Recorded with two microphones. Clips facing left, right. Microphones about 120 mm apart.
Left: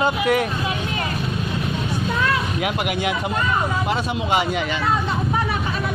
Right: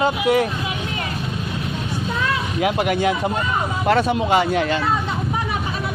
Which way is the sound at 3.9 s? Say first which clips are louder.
Right 5 dB; 55° right (ahead or behind).